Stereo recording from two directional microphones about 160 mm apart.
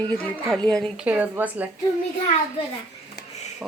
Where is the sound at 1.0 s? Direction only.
10° right (ahead or behind).